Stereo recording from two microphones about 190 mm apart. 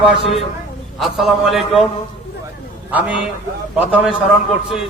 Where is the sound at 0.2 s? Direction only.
30° left (ahead or behind).